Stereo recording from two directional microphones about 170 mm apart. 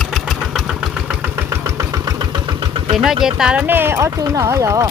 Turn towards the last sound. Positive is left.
turn(degrees=-20)  # may be behind; listen again after turning